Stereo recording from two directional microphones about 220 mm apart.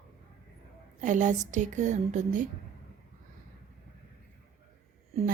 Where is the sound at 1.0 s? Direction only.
35° right (ahead or behind).